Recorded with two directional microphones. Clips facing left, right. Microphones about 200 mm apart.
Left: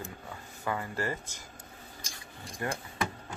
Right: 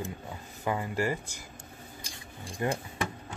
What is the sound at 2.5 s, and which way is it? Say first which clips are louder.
Speech: right 3 dB; 25° right (ahead or behind).